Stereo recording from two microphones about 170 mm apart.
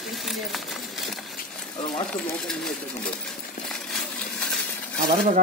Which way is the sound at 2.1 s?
5° left (ahead or behind).